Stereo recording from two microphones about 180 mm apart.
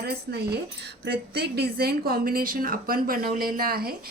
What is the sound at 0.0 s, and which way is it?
A woman's voice, 65° right (ahead or behind).